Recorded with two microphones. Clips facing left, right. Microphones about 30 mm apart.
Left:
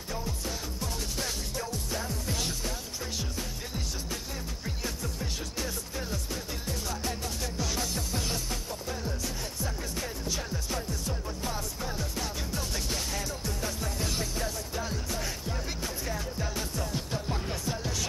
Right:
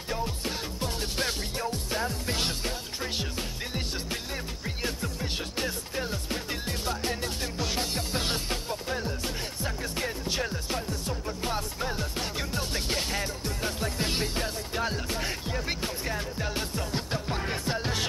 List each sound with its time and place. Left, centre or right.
0.1 s music: right